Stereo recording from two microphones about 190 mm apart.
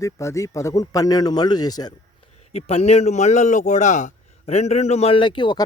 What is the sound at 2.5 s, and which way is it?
A man's voice, 35° left (ahead or behind).